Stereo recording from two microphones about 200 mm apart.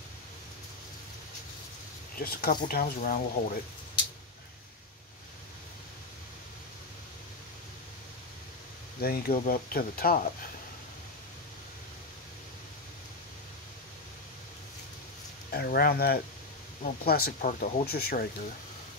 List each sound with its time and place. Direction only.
2.1 s speech: 50° left (ahead or behind)
9.0 s speech: 50° left (ahead or behind)
15.5 s speech: 50° left (ahead or behind)